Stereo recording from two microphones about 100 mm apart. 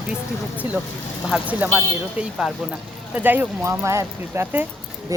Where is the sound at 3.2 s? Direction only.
15° right (ahead or behind).